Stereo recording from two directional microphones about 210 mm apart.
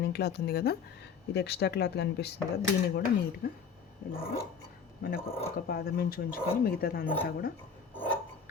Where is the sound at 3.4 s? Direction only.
45° left (ahead or behind).